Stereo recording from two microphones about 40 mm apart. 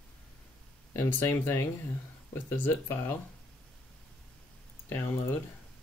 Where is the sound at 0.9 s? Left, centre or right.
Left.